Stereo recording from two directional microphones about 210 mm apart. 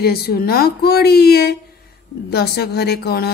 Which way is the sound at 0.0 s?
45° left (ahead or behind).